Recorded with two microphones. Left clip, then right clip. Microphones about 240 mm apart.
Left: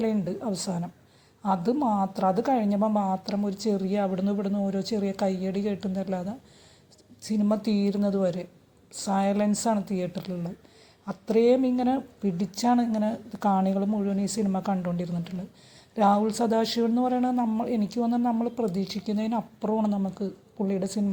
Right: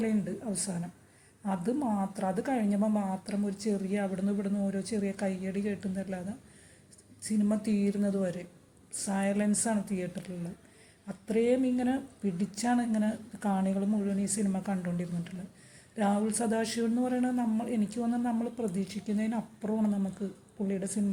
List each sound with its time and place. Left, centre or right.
0.0 s speech: left
7.2 s speech: left